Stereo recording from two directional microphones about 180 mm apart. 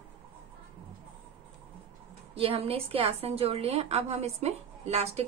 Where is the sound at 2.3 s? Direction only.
30° right (ahead or behind).